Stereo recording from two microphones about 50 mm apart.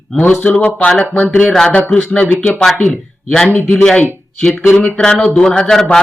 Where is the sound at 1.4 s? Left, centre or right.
Centre.